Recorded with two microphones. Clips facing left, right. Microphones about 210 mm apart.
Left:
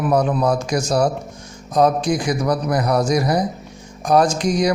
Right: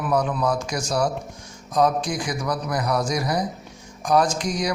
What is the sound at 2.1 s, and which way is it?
Speech, 60° left (ahead or behind).